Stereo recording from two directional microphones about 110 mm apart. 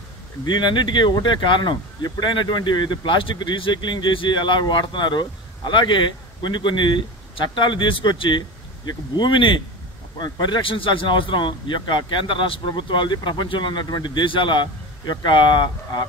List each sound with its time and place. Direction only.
0.5 s speech: 45° left (ahead or behind)